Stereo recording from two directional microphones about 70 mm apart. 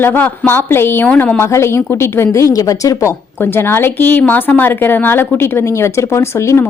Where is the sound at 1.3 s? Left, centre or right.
Left.